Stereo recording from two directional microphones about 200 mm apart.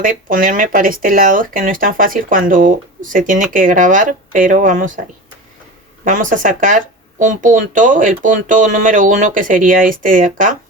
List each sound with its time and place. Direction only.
0.0 s speech: 40° right (ahead or behind)
6.1 s speech: 40° right (ahead or behind)